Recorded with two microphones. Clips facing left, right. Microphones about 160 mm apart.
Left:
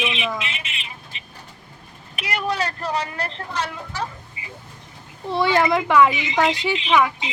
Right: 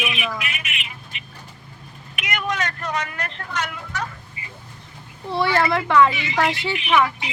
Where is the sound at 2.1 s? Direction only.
35° left (ahead or behind).